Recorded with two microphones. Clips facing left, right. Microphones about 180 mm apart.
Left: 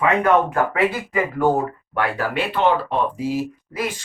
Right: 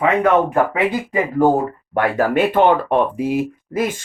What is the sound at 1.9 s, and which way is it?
Speech, 45° right (ahead or behind).